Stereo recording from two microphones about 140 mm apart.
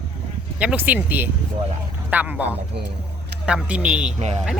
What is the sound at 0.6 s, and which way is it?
Speech, 10° right (ahead or behind).